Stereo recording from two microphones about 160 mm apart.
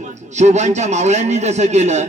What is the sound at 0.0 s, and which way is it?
A man's voice, 45° right (ahead or behind).